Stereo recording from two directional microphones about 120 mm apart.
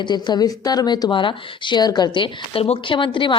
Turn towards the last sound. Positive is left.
turn(degrees=45)  # may be behind; listen again after turning